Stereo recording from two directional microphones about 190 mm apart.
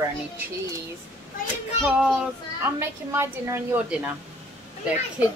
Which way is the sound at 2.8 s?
15° right (ahead or behind).